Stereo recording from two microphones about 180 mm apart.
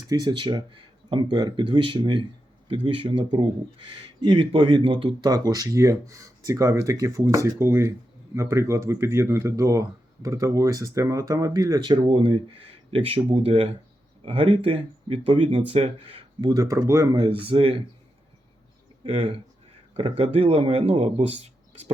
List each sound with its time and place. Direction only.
0.1 s speech: 25° right (ahead or behind)
17.4 s speech: 30° right (ahead or behind)
19.0 s speech: 30° right (ahead or behind)